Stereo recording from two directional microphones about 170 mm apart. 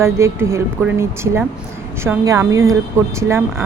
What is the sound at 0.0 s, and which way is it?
A woman's voice, 15° right (ahead or behind).